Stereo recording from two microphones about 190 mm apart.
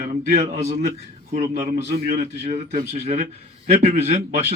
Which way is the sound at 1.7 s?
55° right (ahead or behind).